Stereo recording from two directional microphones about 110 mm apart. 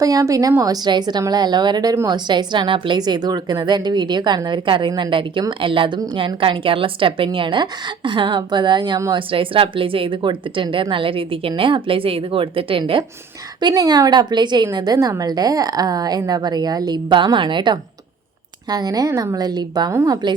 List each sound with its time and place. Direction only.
0.0 s a woman's voice: 35° right (ahead or behind)
9.1 s a woman's voice: 55° right (ahead or behind)
13.6 s a woman's voice: 40° right (ahead or behind)
19.9 s a woman's voice: 25° right (ahead or behind)